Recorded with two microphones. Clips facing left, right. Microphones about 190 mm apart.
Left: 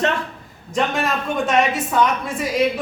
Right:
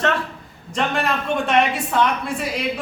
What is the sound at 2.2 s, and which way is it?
Speech, centre (ahead or behind).